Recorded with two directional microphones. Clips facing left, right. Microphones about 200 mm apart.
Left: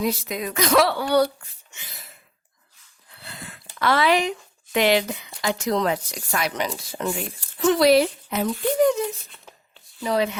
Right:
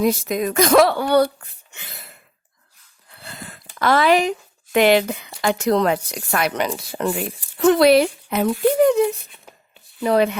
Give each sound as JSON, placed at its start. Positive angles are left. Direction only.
{"t": 0.0, "sound": "speech", "side_deg": -50}
{"t": 3.2, "sound": "speech", "side_deg": -45}